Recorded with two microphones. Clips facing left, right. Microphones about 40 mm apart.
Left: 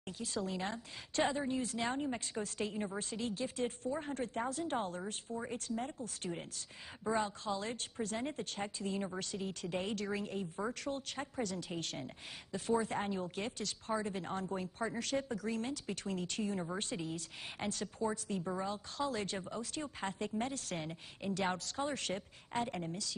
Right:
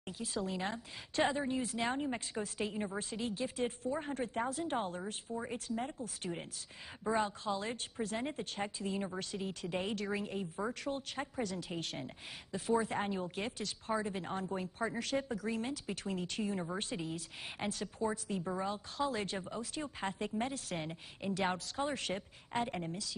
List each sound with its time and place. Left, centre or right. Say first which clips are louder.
0.2 s speech: right 1 dB; centre